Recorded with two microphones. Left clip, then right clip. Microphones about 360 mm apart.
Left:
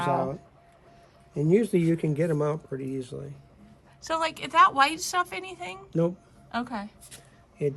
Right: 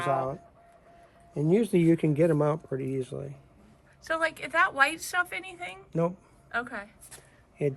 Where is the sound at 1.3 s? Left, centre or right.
Centre.